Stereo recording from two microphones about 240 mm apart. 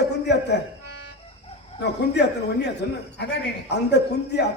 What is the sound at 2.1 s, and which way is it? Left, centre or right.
A man's voice, left.